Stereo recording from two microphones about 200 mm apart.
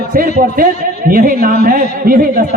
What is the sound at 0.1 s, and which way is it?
A man's voice, 45° right (ahead or behind).